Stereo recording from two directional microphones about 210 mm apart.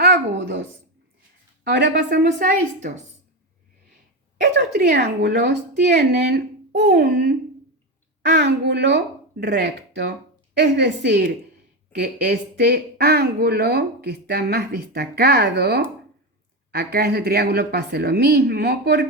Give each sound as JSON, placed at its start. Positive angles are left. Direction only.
{"t": 0.0, "sound": "a sound", "side_deg": -55}
{"t": 1.6, "sound": "speech", "side_deg": -55}
{"t": 4.4, "sound": "speech", "side_deg": -55}